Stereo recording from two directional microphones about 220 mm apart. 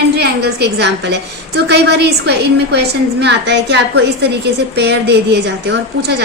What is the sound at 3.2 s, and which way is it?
A woman's voice, 50° right (ahead or behind).